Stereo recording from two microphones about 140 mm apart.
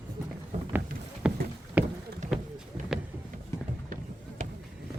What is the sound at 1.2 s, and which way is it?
Rowboat, 5° right (ahead or behind).